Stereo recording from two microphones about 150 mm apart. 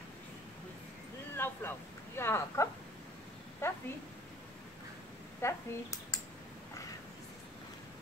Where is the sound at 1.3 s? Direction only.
15° left (ahead or behind).